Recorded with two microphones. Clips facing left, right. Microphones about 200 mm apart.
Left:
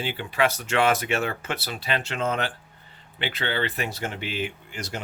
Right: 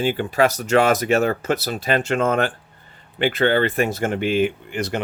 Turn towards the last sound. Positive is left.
turn(degrees=-60)  # may be behind; listen again after turning